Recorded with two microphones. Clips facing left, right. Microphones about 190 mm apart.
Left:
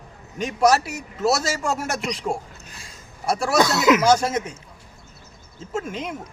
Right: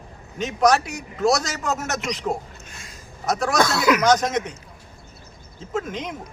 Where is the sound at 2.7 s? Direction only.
30° left (ahead or behind).